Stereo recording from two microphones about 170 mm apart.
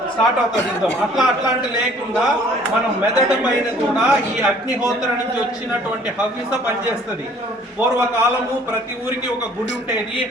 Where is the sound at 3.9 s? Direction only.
5° right (ahead or behind).